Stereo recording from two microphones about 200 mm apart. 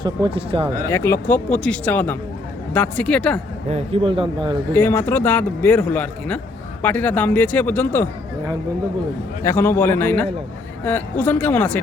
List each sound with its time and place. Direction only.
0.0 s speech: 25° right (ahead or behind)
0.9 s a man's voice: 10° left (ahead or behind)
3.7 s speech: 30° right (ahead or behind)
4.7 s a man's voice: 10° left (ahead or behind)
9.4 s a man's voice: 10° left (ahead or behind)